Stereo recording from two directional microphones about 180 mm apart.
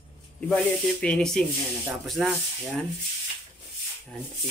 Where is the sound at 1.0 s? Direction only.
5° left (ahead or behind).